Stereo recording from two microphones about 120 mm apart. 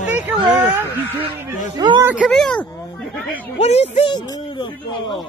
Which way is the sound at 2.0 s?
15° right (ahead or behind).